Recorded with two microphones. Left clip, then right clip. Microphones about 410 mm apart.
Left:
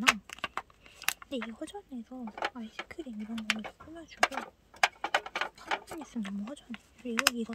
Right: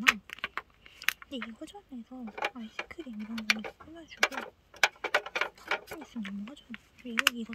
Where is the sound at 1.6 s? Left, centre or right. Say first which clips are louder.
Left 3 dB; centre.